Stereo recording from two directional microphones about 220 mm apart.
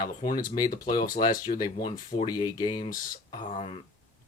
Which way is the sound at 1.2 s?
20° left (ahead or behind).